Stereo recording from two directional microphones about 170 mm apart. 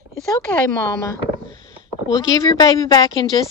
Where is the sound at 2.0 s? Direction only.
20° left (ahead or behind).